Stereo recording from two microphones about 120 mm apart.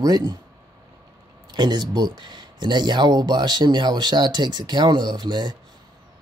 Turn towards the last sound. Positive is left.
turn(degrees=-40)  # may be behind; listen again after turning